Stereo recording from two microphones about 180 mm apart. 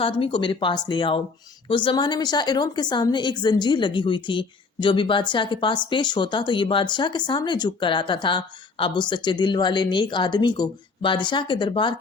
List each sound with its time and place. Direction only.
0.0 s a woman's voice: 30° left (ahead or behind)